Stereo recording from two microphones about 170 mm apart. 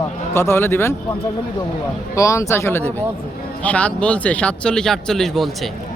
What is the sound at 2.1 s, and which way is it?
Speech, 20° left (ahead or behind).